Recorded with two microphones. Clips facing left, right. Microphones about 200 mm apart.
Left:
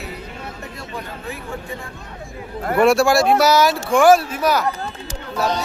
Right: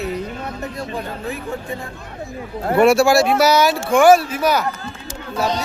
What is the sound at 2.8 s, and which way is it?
Speech, centre (ahead or behind).